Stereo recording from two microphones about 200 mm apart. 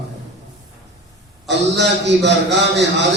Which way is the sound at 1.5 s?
60° right (ahead or behind).